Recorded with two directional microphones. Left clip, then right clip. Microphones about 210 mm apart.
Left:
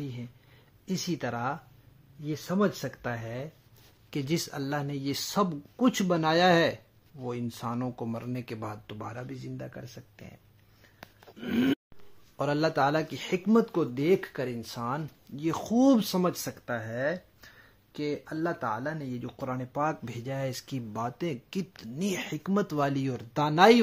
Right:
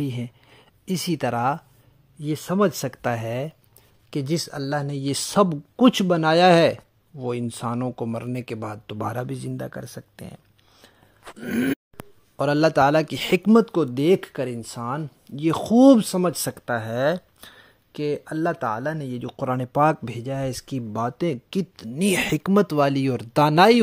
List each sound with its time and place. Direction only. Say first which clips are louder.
0.0 s speech: right 11 dB; 55° right (ahead or behind)
4.1 s speech: right 5 dB; 25° right (ahead or behind)
9.0 s speech: right 12 dB; 50° right (ahead or behind)
11.3 s grunt: right 3 dB; 20° right (ahead or behind)
12.4 s speech: right 8 dB; 30° right (ahead or behind)
20.1 s speech: right 6 dB; 30° right (ahead or behind); by 23.8 s 45° right (ahead or behind)